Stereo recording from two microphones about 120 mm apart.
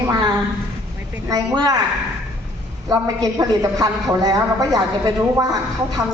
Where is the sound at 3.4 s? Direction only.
30° right (ahead or behind).